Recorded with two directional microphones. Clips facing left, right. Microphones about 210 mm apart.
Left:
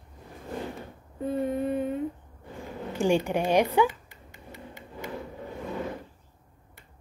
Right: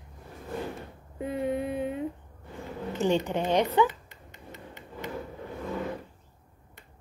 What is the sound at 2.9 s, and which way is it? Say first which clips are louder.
Speech: left 2 dB; 10° left (ahead or behind).